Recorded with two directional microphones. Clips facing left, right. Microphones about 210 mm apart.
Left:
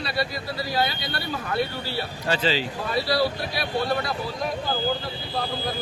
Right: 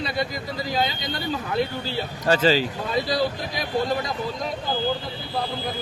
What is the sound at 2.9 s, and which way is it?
Speech, 20° right (ahead or behind).